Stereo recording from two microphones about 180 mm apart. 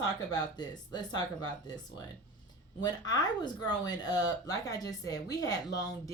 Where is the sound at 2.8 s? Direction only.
20° left (ahead or behind).